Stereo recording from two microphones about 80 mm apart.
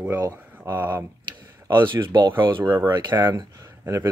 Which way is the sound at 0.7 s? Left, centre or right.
Right.